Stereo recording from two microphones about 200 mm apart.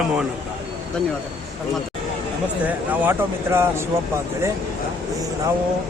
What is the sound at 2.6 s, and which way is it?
A man's voice, 10° right (ahead or behind).